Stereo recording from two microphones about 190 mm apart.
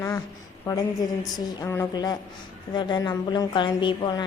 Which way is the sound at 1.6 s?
15° left (ahead or behind).